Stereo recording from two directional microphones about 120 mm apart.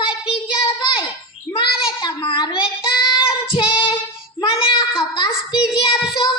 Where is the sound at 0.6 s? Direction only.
45° left (ahead or behind).